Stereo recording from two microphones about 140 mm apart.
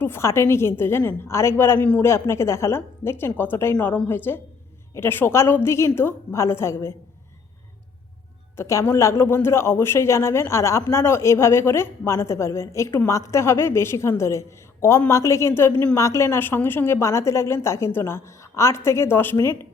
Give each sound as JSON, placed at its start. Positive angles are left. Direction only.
{"t": 0.0, "sound": "a woman's voice", "side_deg": 20}
{"t": 8.5, "sound": "speech", "side_deg": 20}